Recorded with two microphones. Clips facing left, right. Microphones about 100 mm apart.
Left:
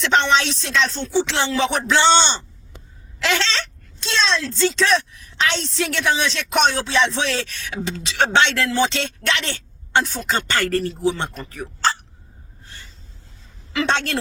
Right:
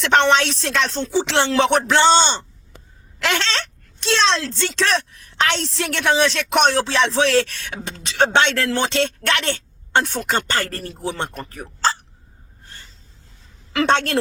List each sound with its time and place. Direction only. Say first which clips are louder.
0.0 s speech: right 2 dB; 55° right (ahead or behind)
0.9 s speech: right 3 dB; 90° right
1.2 s speech: right 4 dB; 70° right (ahead or behind)
2.0 s speech: even; 35° right (ahead or behind)
3.2 s speech: even; 50° right (ahead or behind); by 4.9 s 75° right (ahead or behind)
5.7 s speech: right 2 dB; 60° right (ahead or behind)
6.7 s music: right 3 dB; 75° right (ahead or behind)
7.2 s speech: right 7 dB; 60° right (ahead or behind)
10.6 s speech: left 6 dB; 35° right (ahead or behind)
11.1 s speech: even; 50° right (ahead or behind); by 11.9 s 35° right (ahead or behind)
13.7 s speech: right 3 dB; 50° right (ahead or behind)